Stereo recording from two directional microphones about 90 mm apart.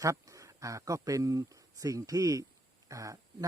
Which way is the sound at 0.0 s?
35° right (ahead or behind).